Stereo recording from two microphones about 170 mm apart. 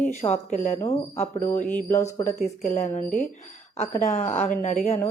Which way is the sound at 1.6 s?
10° left (ahead or behind).